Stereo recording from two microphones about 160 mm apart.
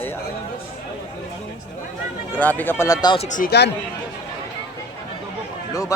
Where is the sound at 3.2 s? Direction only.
50° left (ahead or behind).